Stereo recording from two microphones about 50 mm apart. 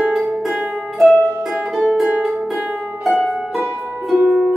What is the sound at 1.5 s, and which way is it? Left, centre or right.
Music, centre.